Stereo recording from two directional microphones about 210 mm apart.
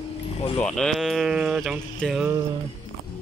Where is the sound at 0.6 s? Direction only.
Centre (ahead or behind).